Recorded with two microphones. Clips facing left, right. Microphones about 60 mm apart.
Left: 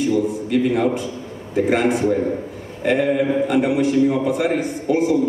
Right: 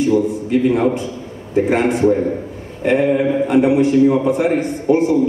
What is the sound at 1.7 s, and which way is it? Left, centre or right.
A man's voice, right.